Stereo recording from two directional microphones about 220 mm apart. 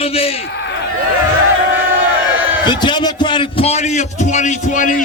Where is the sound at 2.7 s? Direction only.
20° left (ahead or behind).